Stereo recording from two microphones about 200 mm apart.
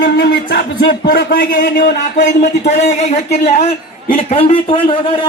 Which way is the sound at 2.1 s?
40° left (ahead or behind).